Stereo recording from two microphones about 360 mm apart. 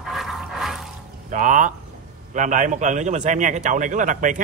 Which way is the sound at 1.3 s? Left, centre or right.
Right.